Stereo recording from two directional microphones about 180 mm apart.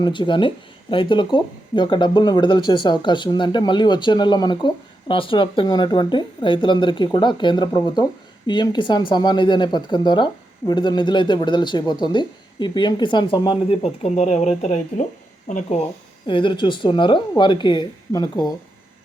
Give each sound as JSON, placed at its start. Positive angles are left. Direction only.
{"t": 0.0, "sound": "speech", "side_deg": 25}
{"t": 16.2, "sound": "speech", "side_deg": 25}